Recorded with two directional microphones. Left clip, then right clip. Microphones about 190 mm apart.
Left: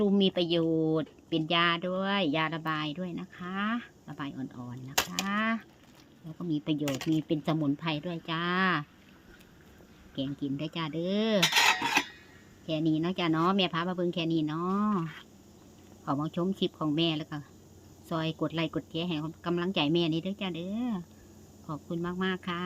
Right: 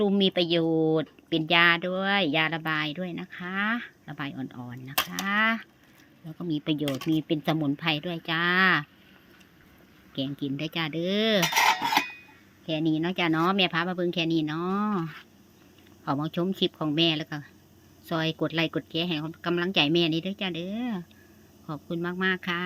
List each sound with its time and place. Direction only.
0.0 s speech: 10° right (ahead or behind)
10.2 s speech: 15° right (ahead or behind)
11.4 s cutlery: 35° right (ahead or behind)
12.6 s speech: 10° right (ahead or behind)
16.0 s speech: 15° right (ahead or behind)